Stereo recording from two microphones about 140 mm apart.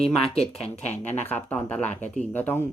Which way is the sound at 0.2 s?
45° left (ahead or behind).